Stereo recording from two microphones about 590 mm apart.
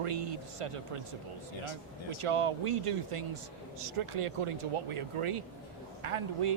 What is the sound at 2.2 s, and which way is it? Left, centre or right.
Speech, right.